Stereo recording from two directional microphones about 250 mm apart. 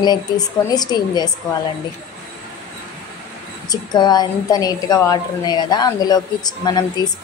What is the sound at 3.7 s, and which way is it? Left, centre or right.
A woman's voice, centre.